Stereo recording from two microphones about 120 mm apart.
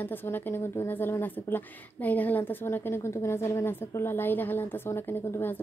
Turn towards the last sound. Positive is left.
turn(degrees=20)  # may be behind; listen again after turning